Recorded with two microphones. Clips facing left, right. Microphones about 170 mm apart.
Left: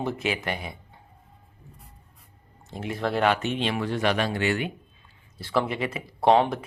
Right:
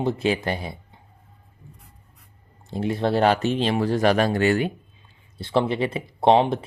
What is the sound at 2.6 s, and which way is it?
Speech, 30° right (ahead or behind).